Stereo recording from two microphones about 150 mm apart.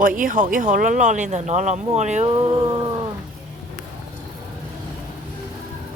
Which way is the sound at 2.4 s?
30° right (ahead or behind).